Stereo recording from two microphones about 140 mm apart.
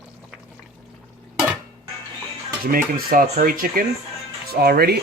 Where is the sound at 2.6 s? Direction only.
90° right.